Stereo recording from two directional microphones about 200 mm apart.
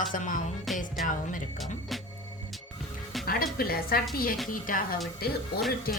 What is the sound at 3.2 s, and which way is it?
A woman's voice, 50° left (ahead or behind).